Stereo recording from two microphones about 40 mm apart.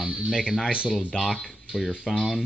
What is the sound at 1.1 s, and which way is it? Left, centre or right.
Speech, centre.